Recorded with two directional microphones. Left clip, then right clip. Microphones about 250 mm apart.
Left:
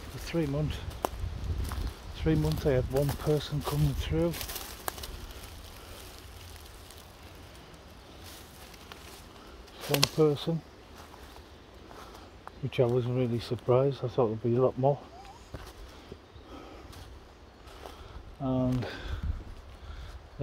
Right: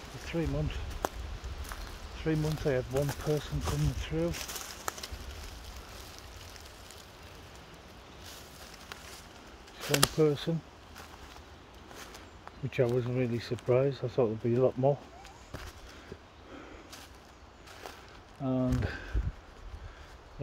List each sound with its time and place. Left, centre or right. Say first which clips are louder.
0.2 s speech: left 3 dB; centre
2.1 s speech: left 3 dB; centre
10.1 s speech: left 2 dB; centre
12.6 s speech: left 2 dB; centre
18.4 s a sound: left 1 dB; centre